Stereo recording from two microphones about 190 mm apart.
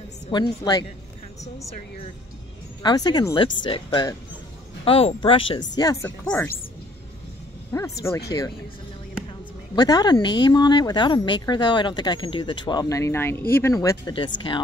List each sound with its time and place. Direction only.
0.3 s speech: 20° left (ahead or behind)
2.8 s speech: 20° left (ahead or behind)
6.0 s speech: 10° left (ahead or behind)
7.7 s speech: 15° left (ahead or behind)
9.3 s speech: 20° left (ahead or behind)